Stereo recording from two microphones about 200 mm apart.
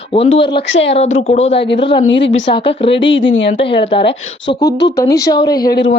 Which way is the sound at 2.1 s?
65° left (ahead or behind).